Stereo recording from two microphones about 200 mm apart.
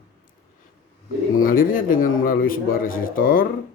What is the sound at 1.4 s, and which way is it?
Speech, 45° left (ahead or behind).